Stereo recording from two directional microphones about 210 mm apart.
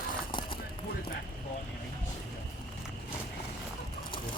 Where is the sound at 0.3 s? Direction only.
25° left (ahead or behind).